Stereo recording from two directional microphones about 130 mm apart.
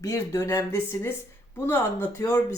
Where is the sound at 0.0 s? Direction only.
25° left (ahead or behind).